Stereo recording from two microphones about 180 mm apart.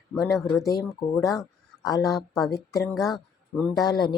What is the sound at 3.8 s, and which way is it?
Speech, 25° left (ahead or behind).